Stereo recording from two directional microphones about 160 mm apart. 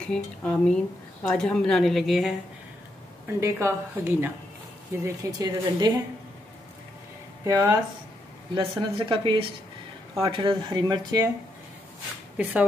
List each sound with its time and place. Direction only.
0.0 s a woman's voice: 5° left (ahead or behind)
3.3 s a woman's voice: 15° right (ahead or behind)
7.4 s speech: 20° right (ahead or behind)